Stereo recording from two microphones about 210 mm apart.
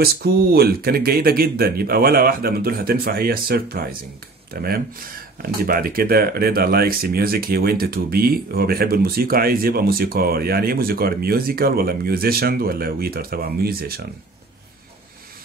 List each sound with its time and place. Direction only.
0.0 s speech: 45° right (ahead or behind)